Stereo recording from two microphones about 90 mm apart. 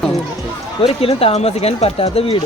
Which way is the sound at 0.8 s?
90° left.